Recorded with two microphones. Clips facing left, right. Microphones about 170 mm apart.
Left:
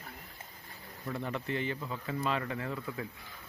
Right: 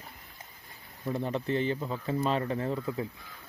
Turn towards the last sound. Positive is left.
turn(degrees=-25)  # may be behind; listen again after turning